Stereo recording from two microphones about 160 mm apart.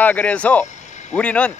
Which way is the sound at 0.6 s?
50° left (ahead or behind).